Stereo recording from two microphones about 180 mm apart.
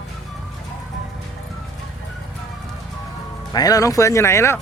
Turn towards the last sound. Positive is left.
turn(degrees=15)  # may be behind; listen again after turning